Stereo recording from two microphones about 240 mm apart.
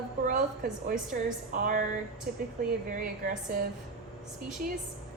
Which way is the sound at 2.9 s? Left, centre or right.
Right.